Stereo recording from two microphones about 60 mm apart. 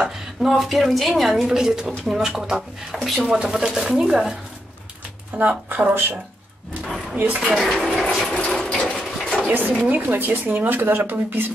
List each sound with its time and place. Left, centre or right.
0.0 s a woman's voice: centre
3.3 s speech: centre
5.7 s speech: right
6.8 s drawer open or close: centre
7.3 s speech: centre
8.0 s a sound: centre
8.5 s sewing machine: centre
8.9 s a sound: centre
9.8 s speech: right